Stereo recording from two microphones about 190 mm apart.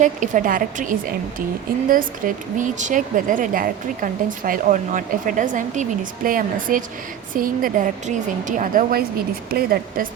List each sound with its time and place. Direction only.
0.0 s speech: 45° right (ahead or behind)